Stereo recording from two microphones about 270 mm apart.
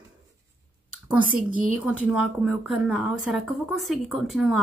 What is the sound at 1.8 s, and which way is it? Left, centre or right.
A woman's voice, centre.